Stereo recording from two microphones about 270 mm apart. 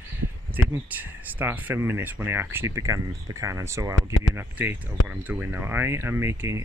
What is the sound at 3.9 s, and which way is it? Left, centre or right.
Speech, left.